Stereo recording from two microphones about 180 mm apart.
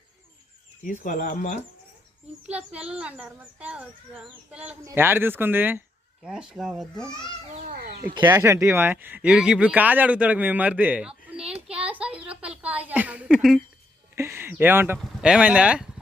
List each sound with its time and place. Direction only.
0.8 s speech: 45° left (ahead or behind)
2.5 s speech: 5° right (ahead or behind)
7.7 s a sound: 60° right (ahead or behind)
8.1 s speech: 20° right (ahead or behind); by 13.6 s 5° right (ahead or behind)
14.2 s speech: 15° right (ahead or behind)